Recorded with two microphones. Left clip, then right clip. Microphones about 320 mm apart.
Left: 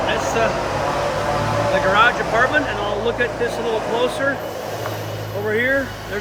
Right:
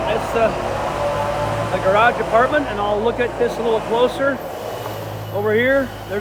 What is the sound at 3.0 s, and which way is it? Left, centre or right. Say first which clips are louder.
Speech: right 2 dB; centre.